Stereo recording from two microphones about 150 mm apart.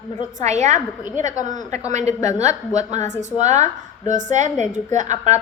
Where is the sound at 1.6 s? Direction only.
25° left (ahead or behind).